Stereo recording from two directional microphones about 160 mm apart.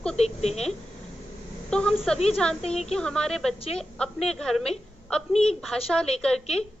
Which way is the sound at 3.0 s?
5° left (ahead or behind).